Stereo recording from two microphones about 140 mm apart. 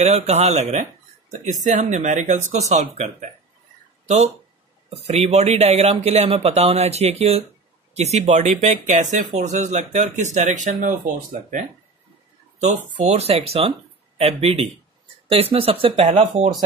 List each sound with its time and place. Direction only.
0.0 s speech: 50° right (ahead or behind)
4.8 s speech: 50° right (ahead or behind); by 11.6 s 75° right (ahead or behind)
12.5 s speech: 60° right (ahead or behind); by 16.4 s 45° right (ahead or behind)